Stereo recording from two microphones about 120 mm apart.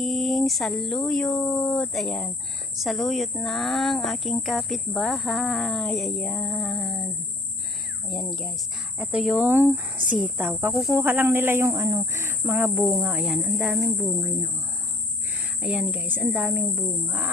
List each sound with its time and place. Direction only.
0.0 s speech: centre (ahead or behind)
8.1 s speech: 5° left (ahead or behind)
9.0 s a woman's voice: 5° right (ahead or behind)
13.7 s speech: 25° right (ahead or behind)
15.6 s a woman's voice: 10° right (ahead or behind)